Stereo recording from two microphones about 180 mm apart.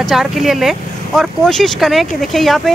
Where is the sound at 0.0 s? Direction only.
Centre (ahead or behind).